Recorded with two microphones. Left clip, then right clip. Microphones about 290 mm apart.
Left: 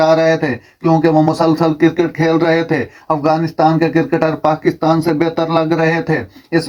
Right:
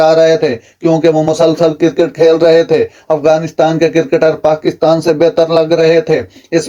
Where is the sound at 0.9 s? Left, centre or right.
Left.